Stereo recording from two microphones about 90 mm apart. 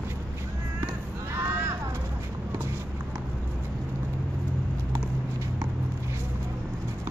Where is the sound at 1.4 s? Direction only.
25° right (ahead or behind).